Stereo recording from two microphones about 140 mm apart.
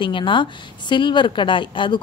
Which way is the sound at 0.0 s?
35° left (ahead or behind).